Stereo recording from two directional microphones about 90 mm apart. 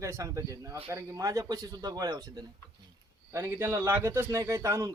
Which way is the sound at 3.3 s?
25° right (ahead or behind).